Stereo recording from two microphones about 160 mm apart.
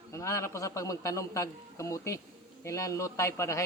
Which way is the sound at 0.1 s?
20° left (ahead or behind).